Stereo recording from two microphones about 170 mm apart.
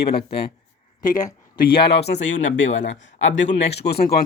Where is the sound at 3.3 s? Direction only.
80° left.